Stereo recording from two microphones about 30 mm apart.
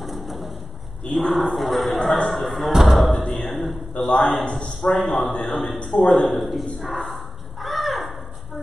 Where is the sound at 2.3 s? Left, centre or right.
Centre.